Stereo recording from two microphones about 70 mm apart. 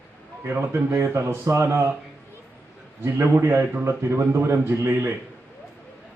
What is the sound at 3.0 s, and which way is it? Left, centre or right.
Speech, right.